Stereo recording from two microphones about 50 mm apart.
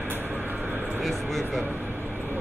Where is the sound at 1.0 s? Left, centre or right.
Centre.